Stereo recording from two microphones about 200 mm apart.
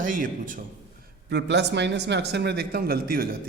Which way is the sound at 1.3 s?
60° right (ahead or behind).